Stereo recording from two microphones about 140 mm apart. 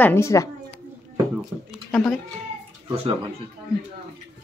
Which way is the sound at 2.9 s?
45° right (ahead or behind).